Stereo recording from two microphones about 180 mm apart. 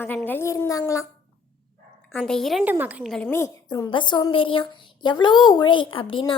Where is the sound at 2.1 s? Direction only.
5° left (ahead or behind).